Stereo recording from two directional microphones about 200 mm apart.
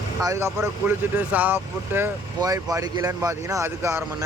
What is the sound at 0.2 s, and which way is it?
Speech, 15° right (ahead or behind).